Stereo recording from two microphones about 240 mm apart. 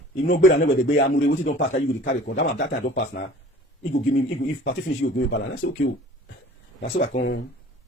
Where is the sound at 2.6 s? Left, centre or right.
Left.